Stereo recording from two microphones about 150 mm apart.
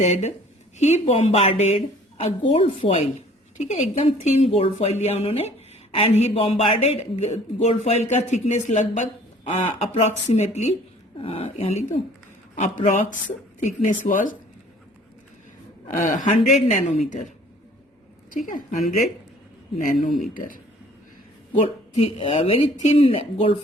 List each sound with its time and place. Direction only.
0.0 s a woman's voice: 50° left (ahead or behind)
11.2 s speech: 40° left (ahead or behind); by 14.3 s 60° left (ahead or behind)
15.9 s a woman's voice: 60° left (ahead or behind)
18.3 s speech: 65° left (ahead or behind)
19.8 s speech: 65° left (ahead or behind)
21.5 s speech: 40° left (ahead or behind)